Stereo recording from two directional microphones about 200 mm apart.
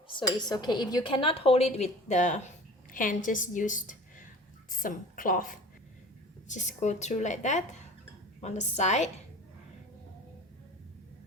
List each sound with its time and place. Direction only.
0.1 s a woman's voice: 20° left (ahead or behind)